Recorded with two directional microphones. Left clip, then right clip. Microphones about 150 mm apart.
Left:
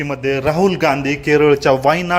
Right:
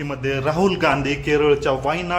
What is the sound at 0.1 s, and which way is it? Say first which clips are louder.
A man's voice: left 4 dB; 30° left (ahead or behind).